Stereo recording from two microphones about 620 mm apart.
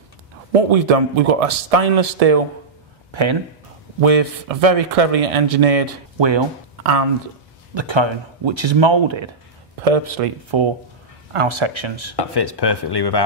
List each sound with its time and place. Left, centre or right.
0.7 s speech: right
3.1 s speech: right
4.0 s speech: right
6.1 s speech: right
6.8 s speech: right
7.7 s speech: right
9.8 s speech: right
10.5 s speech: right
12.2 s speech: left